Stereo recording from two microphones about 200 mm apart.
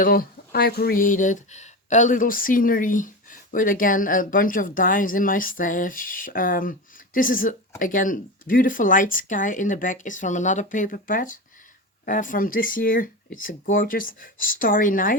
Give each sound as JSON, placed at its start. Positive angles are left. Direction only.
{"t": 0.0, "sound": "speech", "side_deg": 45}